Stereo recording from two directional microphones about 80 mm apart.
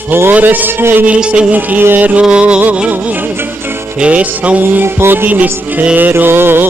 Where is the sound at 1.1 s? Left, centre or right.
Centre.